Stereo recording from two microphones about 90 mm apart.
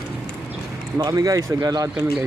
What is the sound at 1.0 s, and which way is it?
Speech, 40° right (ahead or behind).